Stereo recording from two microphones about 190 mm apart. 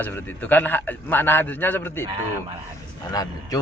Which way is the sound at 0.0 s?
10° left (ahead or behind).